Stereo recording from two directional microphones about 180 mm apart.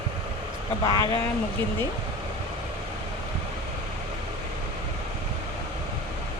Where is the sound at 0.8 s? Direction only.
20° left (ahead or behind).